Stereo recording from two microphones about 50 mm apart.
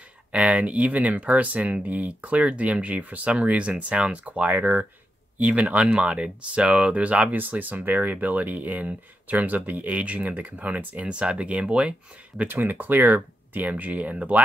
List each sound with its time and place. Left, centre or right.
0.3 s speech: right
11.1 s speech: right
12.4 s speech: right